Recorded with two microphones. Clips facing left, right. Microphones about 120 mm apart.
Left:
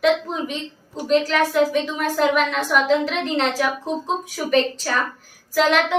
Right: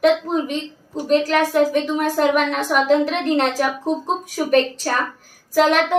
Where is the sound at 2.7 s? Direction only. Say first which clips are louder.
Right 2 dB; 50° right (ahead or behind).